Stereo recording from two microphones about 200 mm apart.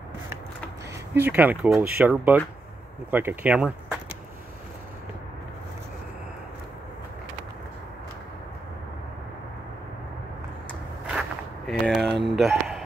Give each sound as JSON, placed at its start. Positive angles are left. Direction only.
{"t": 1.1, "sound": "speech", "side_deg": -10}
{"t": 11.1, "sound": "a sound", "side_deg": -5}
{"t": 11.8, "sound": "speech", "side_deg": 5}